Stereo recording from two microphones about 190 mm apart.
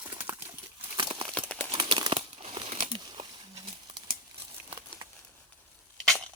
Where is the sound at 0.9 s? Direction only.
25° right (ahead or behind).